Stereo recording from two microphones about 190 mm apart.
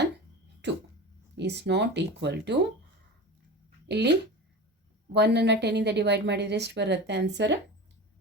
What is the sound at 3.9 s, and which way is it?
Speech, 65° right (ahead or behind).